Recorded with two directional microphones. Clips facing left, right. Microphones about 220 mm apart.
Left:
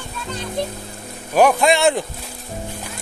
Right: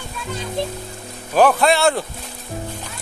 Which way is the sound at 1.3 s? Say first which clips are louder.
Even; 15° left (ahead or behind).